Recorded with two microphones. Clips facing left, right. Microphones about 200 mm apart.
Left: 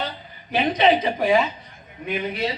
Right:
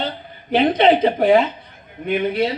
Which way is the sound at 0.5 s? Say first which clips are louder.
Right 4 dB; 55° right (ahead or behind).